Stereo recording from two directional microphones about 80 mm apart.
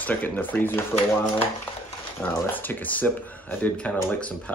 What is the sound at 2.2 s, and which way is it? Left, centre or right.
Speech, left.